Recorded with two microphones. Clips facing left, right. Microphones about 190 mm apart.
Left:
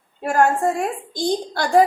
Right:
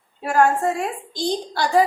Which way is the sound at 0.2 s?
50° left (ahead or behind).